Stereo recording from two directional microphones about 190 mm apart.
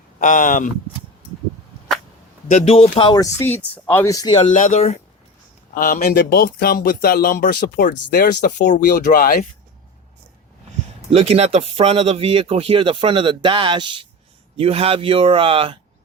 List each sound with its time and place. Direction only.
0.2 s speech: 40° left (ahead or behind)
2.5 s speech: 35° left (ahead or behind)
4.5 s speech: 40° left (ahead or behind)
5.7 s speech: 50° left (ahead or behind)
9.0 s speech: 45° left (ahead or behind)
11.1 s speech: 35° right (ahead or behind)